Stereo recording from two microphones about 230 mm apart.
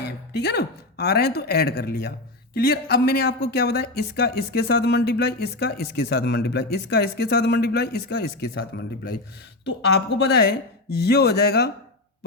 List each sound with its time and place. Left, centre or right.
0.0 s speech: left